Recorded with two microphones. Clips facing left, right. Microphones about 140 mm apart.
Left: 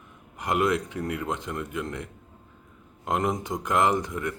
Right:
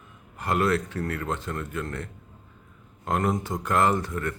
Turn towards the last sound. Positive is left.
turn(degrees=15)  # may be behind; listen again after turning